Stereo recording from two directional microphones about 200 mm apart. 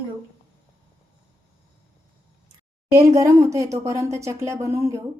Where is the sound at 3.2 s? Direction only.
15° right (ahead or behind).